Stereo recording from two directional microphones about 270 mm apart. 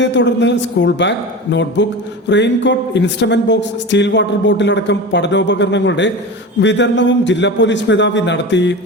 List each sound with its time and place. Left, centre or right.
0.0 s speech: left